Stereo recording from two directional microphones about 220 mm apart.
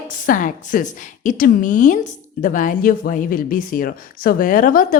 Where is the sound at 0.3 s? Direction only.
40° left (ahead or behind).